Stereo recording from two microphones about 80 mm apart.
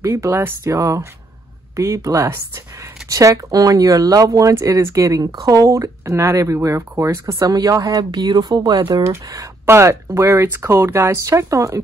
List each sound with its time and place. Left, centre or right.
0.2 s speech: right
8.2 s speech: right
9.0 s speech: right